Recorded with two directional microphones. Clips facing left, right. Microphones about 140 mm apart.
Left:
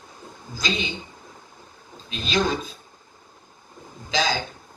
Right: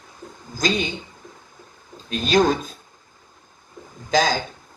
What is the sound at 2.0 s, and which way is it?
Speech, 45° right (ahead or behind).